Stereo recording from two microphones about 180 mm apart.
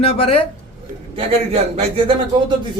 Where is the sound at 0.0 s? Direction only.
30° left (ahead or behind).